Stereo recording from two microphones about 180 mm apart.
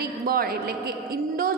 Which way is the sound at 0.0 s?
55° right (ahead or behind).